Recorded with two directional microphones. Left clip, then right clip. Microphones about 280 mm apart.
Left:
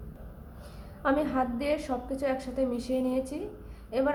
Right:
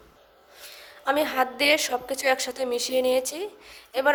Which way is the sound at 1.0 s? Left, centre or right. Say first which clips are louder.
Right 4 dB; right.